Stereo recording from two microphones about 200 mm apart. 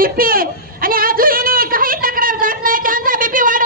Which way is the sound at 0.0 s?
45° right (ahead or behind).